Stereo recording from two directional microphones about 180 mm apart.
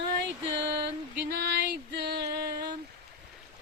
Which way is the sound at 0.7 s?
70° right (ahead or behind).